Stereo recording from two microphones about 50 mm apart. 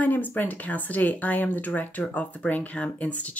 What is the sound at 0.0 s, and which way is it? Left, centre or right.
Speech, left.